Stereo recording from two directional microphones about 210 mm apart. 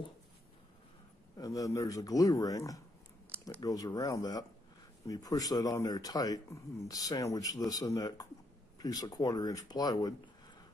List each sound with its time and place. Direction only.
1.4 s speech: 15° left (ahead or behind)